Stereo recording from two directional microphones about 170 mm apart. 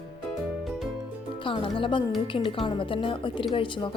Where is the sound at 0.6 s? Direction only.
Centre (ahead or behind).